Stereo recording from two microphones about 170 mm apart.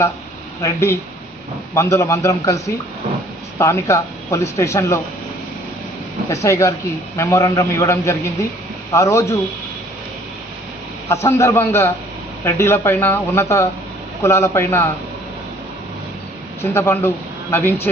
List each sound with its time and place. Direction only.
0.6 s speech: 15° left (ahead or behind)
6.2 s speech: 15° left (ahead or behind)
11.1 s speech: 15° left (ahead or behind)
16.7 s speech: 15° left (ahead or behind)